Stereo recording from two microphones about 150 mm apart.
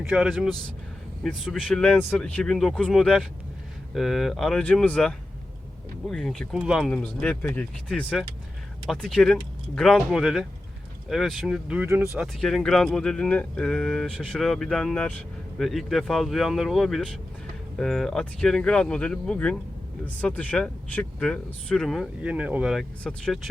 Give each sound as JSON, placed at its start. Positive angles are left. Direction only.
{"t": 0.1, "sound": "speech", "side_deg": -5}
{"t": 6.9, "sound": "speech", "side_deg": 5}